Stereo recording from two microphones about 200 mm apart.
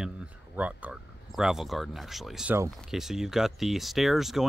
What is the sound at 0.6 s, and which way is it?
Speech, 5° right (ahead or behind).